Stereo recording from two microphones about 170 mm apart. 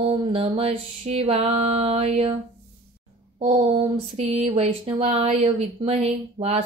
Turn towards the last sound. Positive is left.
turn(degrees=-35)  # may be behind; listen again after turning